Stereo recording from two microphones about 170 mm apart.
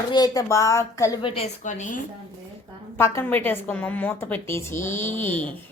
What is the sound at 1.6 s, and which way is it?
Speech, 45° left (ahead or behind).